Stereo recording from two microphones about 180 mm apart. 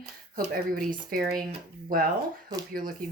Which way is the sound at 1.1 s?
55° right (ahead or behind).